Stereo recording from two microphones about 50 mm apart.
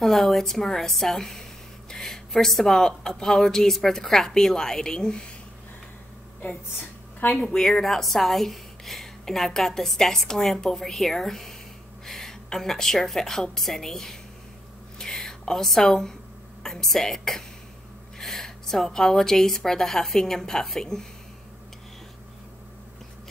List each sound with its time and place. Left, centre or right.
0.0 s a woman's voice: centre
7.2 s speech: left
7.5 s a woman's voice: centre
15.0 s a sound: centre
16.6 s a woman's voice: centre